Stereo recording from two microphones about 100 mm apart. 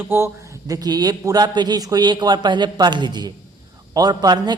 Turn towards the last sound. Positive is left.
turn(degrees=-45)  # may be behind; listen again after turning